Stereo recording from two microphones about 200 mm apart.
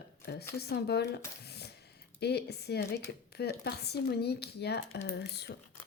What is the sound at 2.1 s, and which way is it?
Speech, 55° left (ahead or behind).